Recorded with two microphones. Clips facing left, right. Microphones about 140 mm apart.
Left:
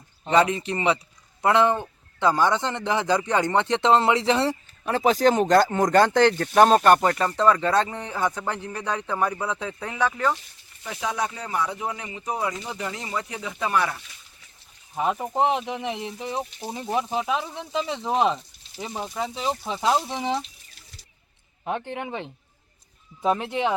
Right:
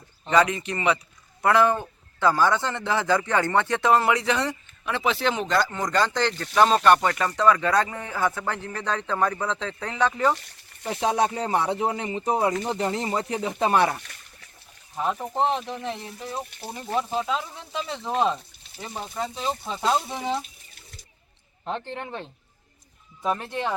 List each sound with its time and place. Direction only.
0.3 s speech: 30° left (ahead or behind); by 10.2 s 10° left (ahead or behind)
10.8 s speech: 30° right (ahead or behind)
13.6 s speech: 30° right (ahead or behind)
13.9 s a sound: 65° right (ahead or behind)
14.9 s speech: 10° left (ahead or behind)
18.8 s speech: 5° left (ahead or behind)
19.3 s speech: 15° left (ahead or behind)
21.6 s speech: 10° left (ahead or behind)